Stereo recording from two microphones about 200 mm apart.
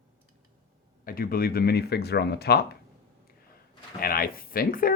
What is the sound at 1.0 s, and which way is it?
Speech, 45° left (ahead or behind).